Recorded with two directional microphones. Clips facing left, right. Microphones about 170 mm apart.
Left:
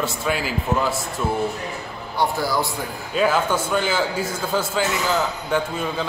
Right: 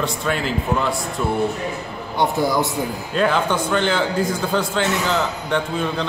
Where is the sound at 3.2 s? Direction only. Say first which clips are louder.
Right 1 dB; 5° left (ahead or behind).